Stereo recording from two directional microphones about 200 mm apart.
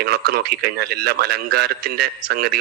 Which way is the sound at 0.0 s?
50° right (ahead or behind).